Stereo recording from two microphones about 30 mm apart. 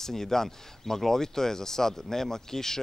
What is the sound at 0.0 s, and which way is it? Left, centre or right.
Speech, centre.